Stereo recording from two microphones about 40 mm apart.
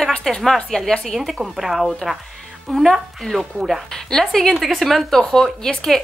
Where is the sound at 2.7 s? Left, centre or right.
Centre.